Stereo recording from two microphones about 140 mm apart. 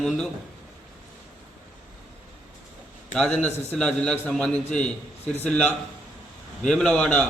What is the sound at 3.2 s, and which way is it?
A man's voice, 5° left (ahead or behind).